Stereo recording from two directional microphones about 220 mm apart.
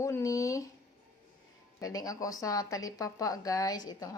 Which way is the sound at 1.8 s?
15° left (ahead or behind).